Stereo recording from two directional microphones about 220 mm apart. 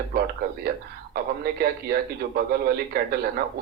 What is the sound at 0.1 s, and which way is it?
A man's voice, 45° right (ahead or behind).